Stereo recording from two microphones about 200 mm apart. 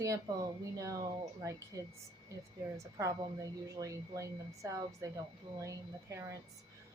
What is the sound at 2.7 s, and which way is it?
A woman's voice, 15° right (ahead or behind).